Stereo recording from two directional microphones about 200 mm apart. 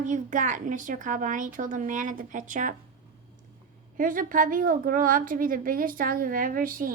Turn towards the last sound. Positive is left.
turn(degrees=-45)  # may be behind; listen again after turning